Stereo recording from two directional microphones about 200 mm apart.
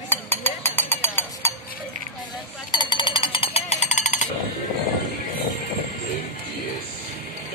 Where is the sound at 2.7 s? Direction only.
20° left (ahead or behind).